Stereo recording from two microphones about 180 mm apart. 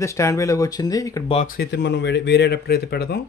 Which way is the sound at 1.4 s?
60° left (ahead or behind).